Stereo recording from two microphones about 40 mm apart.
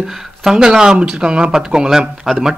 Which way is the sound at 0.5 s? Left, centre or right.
Centre.